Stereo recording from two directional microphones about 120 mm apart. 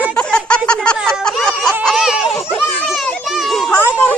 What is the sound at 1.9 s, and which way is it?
Baby laughter, 5° right (ahead or behind).